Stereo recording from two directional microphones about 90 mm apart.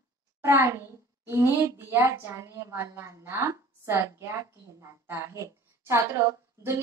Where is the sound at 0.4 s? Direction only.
30° right (ahead or behind).